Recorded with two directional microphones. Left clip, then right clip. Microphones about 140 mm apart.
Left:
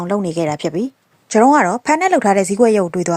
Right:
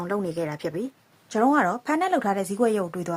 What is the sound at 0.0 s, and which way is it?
A woman's voice, 35° left (ahead or behind).